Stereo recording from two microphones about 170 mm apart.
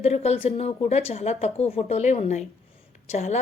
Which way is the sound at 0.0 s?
40° left (ahead or behind).